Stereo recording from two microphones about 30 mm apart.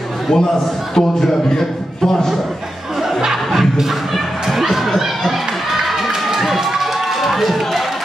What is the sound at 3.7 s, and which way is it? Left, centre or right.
Speech, centre.